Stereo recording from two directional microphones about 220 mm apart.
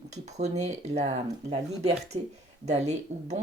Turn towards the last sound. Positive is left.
turn(degrees=-30)  # may be behind; listen again after turning